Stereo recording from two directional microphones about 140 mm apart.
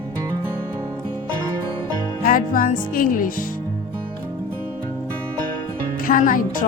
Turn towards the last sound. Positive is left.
turn(degrees=70)  # may be behind; listen again after turning